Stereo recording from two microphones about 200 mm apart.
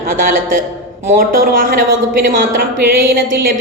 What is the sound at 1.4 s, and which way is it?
Speech, 45° right (ahead or behind).